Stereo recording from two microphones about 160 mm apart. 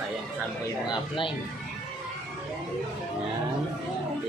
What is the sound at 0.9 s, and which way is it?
Speech, 30° left (ahead or behind).